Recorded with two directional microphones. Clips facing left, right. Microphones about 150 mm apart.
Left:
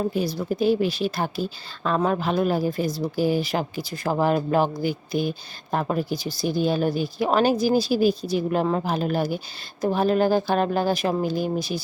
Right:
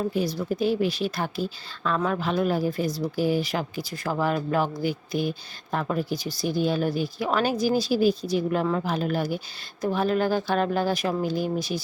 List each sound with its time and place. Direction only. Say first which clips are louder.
0.0 s speech: left 1 dB; 35° left (ahead or behind)